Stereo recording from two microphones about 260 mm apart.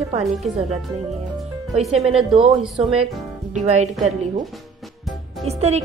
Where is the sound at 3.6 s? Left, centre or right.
Right.